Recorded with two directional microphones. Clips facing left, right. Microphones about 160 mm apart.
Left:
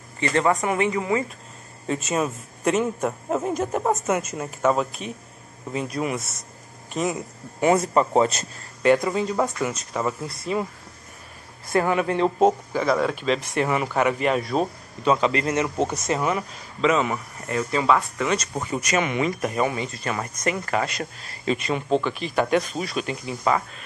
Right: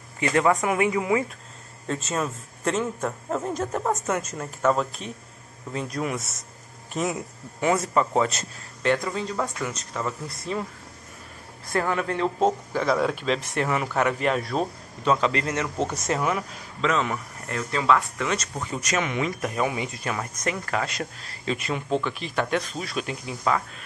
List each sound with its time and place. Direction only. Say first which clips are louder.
0.2 s speech: even; 5° right (ahead or behind)
1.9 s a man's voice: left 3 dB; 15° left (ahead or behind)
7.6 s speech: left 3 dB; 25° left (ahead or behind)
8.8 s a man's voice: left 5 dB; 10° left (ahead or behind)
11.7 s a man's voice: left 4 dB; 15° left (ahead or behind)
12.8 s a man's voice: left 1 dB; centre (ahead or behind)
16.2 s speech: left 1 dB; centre (ahead or behind)
19.7 s speech: left 1 dB; 10° right (ahead or behind)
20.1 s speech: left 4 dB; centre (ahead or behind)